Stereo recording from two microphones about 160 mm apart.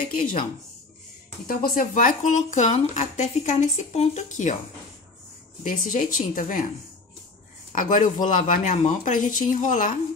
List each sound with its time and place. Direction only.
0.0 s speech: 60° left (ahead or behind)
1.5 s speech: 60° left (ahead or behind)
5.6 s speech: 55° left (ahead or behind)
7.7 s speech: 55° left (ahead or behind)